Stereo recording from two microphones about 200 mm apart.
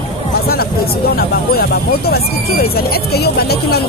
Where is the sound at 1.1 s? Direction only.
50° left (ahead or behind).